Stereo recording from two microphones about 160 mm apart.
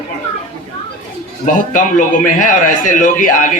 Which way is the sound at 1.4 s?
55° left (ahead or behind).